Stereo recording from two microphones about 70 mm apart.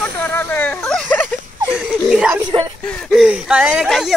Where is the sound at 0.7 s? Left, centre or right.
Centre.